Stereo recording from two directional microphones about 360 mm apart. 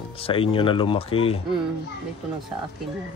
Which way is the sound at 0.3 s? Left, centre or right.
Centre.